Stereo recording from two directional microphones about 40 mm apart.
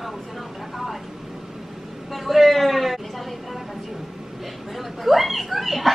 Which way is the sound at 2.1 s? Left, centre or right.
Centre.